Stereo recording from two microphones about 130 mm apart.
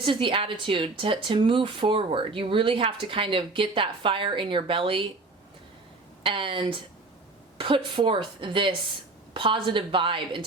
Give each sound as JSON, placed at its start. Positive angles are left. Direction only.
{"t": 0.0, "sound": "speech", "side_deg": -40}
{"t": 6.2, "sound": "speech", "side_deg": -40}